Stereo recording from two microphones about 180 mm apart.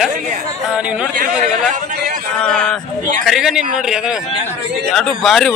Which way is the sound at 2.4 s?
5° left (ahead or behind).